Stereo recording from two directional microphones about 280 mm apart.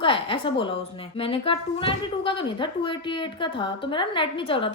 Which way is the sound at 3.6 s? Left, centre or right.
Centre.